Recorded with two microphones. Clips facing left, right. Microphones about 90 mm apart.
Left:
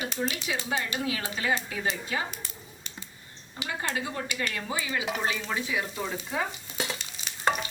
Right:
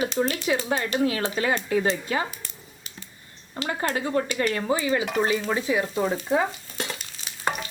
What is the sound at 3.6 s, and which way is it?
Speech, 50° right (ahead or behind).